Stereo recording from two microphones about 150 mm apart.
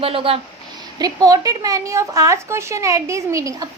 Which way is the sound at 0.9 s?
25° right (ahead or behind).